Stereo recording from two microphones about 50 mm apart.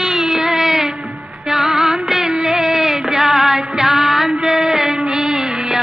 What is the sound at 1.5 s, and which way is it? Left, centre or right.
Music, centre.